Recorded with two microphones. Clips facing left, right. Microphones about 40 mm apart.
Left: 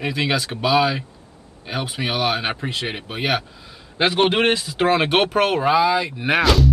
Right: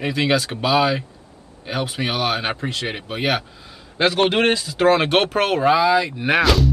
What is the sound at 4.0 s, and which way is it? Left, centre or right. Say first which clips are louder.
Speech: even; centre.